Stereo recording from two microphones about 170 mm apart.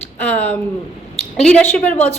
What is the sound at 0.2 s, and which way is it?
A woman's voice, 10° left (ahead or behind).